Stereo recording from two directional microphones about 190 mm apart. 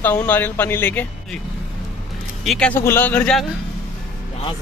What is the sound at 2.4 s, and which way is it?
Speech, centre (ahead or behind).